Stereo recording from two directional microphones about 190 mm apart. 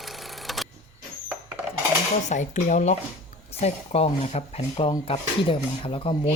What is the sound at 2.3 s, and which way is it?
Speech, 40° left (ahead or behind).